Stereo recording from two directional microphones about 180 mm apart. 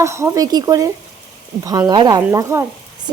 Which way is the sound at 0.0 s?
15° right (ahead or behind).